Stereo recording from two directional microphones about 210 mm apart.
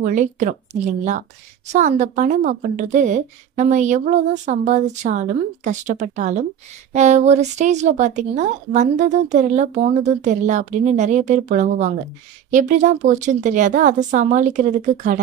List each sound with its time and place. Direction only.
0.0 s a woman's voice: 35° right (ahead or behind)